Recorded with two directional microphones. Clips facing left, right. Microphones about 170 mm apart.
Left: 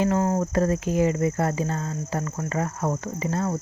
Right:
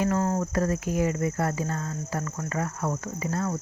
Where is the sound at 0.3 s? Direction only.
25° left (ahead or behind).